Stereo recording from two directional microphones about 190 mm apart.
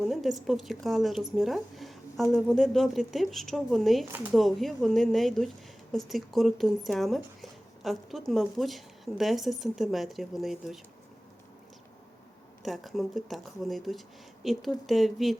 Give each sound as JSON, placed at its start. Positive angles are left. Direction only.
{"t": 0.0, "sound": "a woman's voice", "side_deg": 0}
{"t": 12.6, "sound": "speech", "side_deg": 0}